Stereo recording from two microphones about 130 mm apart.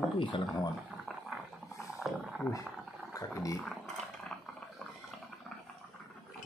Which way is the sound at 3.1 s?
25° left (ahead or behind).